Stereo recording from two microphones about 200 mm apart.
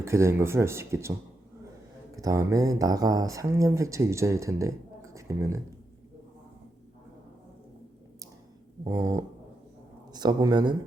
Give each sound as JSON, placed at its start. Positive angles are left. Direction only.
{"t": 0.0, "sound": "speech", "side_deg": -15}
{"t": 2.1, "sound": "speech", "side_deg": -15}
{"t": 8.8, "sound": "a man's voice", "side_deg": -15}